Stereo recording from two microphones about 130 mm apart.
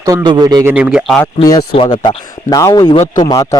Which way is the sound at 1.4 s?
30° left (ahead or behind).